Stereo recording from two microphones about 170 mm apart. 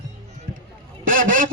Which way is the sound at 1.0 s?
55° right (ahead or behind).